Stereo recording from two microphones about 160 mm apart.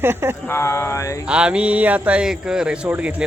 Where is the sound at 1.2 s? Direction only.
5° right (ahead or behind).